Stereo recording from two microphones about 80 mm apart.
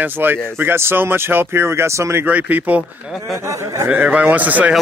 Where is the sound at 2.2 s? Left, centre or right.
Centre.